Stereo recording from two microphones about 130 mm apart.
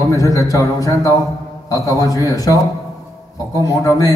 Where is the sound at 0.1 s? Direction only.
25° left (ahead or behind).